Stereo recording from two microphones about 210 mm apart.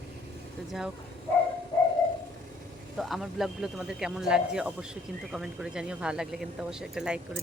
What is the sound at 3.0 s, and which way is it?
Speech, centre (ahead or behind).